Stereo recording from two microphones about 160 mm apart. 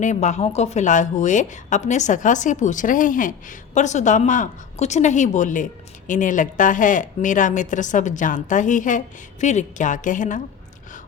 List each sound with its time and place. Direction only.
0.0 s a woman's voice: 50° left (ahead or behind)